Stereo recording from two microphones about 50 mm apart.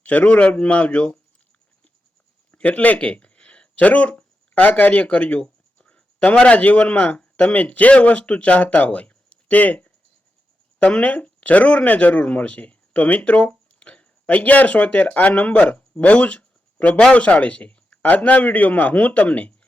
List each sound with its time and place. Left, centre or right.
0.0 s speech: left
2.5 s speech: left
10.9 s a man's voice: left